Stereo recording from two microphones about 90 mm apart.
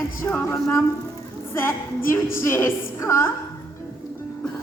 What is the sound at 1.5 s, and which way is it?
A woman's voice, 30° left (ahead or behind).